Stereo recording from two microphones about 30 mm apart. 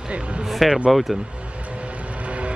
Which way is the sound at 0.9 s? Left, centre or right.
Centre.